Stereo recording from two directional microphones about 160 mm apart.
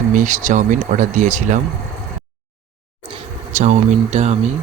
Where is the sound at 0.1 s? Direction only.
55° right (ahead or behind).